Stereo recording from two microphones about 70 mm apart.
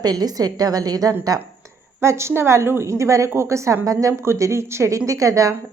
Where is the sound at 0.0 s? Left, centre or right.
Right.